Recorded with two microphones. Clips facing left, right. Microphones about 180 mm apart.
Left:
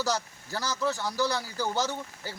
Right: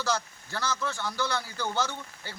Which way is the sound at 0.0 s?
40° left (ahead or behind).